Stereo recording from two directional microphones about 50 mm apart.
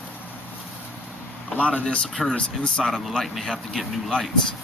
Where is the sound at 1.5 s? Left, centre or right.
Left.